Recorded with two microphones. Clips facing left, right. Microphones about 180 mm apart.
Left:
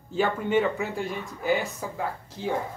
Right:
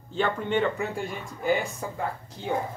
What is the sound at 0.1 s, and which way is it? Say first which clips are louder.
Speech: left 2 dB; 5° left (ahead or behind).